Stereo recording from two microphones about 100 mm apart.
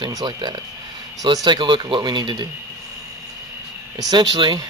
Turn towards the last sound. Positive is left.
turn(degrees=-50)  # may be behind; listen again after turning